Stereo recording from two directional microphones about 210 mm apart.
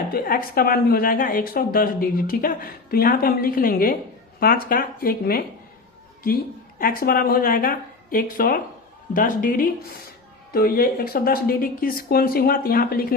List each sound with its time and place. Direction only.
0.1 s a woman's voice: 45° left (ahead or behind)